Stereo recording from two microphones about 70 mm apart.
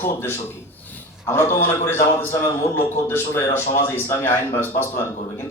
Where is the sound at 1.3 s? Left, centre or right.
Left.